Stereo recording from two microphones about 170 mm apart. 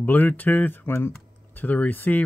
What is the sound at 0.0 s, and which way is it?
Speech, 10° left (ahead or behind).